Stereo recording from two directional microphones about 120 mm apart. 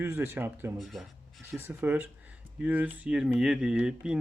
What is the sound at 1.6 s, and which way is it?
Speech, 15° right (ahead or behind).